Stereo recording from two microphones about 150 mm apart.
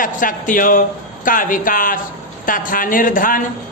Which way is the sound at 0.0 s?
65° left (ahead or behind).